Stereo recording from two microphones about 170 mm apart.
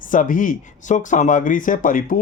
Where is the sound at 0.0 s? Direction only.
50° left (ahead or behind).